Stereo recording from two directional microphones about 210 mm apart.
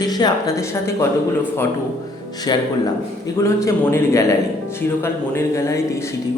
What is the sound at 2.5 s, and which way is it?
A man's voice, 20° left (ahead or behind).